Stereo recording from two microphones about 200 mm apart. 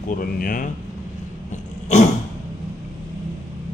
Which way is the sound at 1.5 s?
35° left (ahead or behind).